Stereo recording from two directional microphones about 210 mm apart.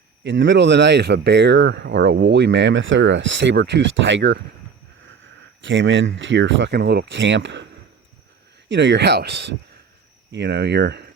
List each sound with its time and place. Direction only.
0.3 s speech: 60° right (ahead or behind)
5.6 s speech: 60° right (ahead or behind)
8.7 s speech: 60° right (ahead or behind)